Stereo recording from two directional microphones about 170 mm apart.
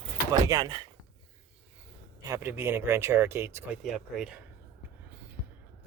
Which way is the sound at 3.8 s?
Centre (ahead or behind).